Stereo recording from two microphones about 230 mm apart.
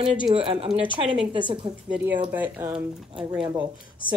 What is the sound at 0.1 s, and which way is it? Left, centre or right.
Speech, right.